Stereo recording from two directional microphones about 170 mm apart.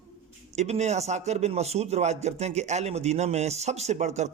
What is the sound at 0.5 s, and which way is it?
A man's voice, 40° right (ahead or behind).